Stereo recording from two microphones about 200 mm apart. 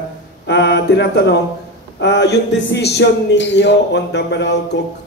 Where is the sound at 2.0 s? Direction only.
60° left (ahead or behind).